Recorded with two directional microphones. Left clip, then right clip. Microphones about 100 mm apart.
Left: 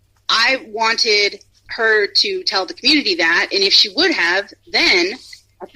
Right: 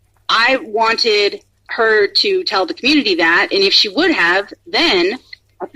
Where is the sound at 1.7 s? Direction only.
35° left (ahead or behind).